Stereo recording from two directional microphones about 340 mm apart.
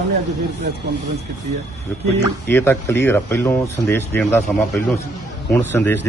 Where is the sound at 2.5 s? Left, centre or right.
Centre.